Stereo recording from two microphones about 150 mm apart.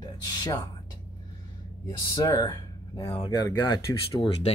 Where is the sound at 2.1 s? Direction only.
25° left (ahead or behind).